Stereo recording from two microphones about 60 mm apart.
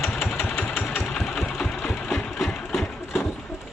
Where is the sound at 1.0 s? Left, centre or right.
Centre.